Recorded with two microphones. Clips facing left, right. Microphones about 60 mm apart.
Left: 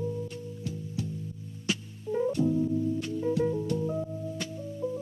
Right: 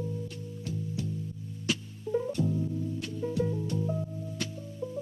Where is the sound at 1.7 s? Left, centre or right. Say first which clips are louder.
Even; centre.